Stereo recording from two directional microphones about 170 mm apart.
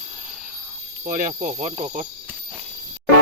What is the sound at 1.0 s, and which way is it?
Speech, 50° right (ahead or behind).